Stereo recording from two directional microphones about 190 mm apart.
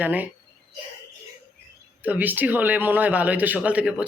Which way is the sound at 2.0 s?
10° right (ahead or behind).